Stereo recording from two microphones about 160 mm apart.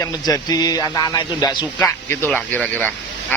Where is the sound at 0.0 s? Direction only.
25° left (ahead or behind).